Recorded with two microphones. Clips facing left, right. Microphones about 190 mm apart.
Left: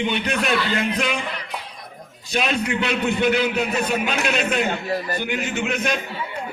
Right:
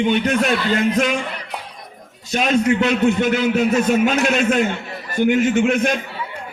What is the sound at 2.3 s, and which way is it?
A man's voice, 45° right (ahead or behind).